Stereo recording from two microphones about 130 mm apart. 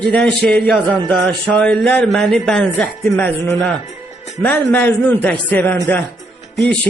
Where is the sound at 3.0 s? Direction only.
15° left (ahead or behind).